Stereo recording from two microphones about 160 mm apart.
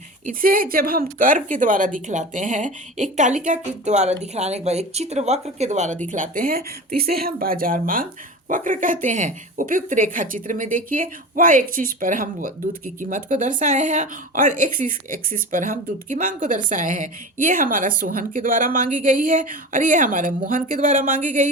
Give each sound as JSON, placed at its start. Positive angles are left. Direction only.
{"t": 0.3, "sound": "a woman's voice", "side_deg": -60}